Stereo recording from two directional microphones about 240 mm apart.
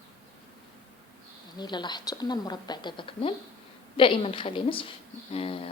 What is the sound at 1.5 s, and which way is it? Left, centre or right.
A woman's voice, centre.